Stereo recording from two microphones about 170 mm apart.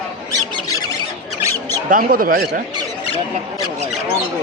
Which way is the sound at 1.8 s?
55° right (ahead or behind).